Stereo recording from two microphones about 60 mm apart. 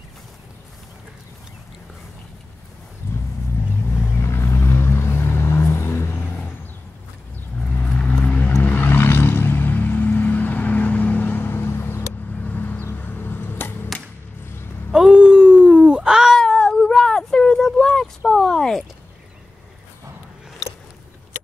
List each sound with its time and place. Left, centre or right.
3.0 s vehicle: left
8.3 s vehicle: left
12.4 s vehicle: left
12.9 s a sound: left
14.9 s a sound: centre
16.3 s cat: centre